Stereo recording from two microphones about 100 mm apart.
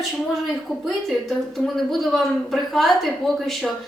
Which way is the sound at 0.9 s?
Centre (ahead or behind).